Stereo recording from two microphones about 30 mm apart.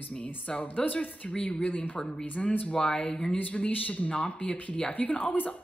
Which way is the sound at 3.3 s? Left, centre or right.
Left.